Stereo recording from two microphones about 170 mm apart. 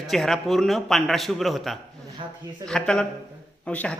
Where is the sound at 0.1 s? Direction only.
Centre (ahead or behind).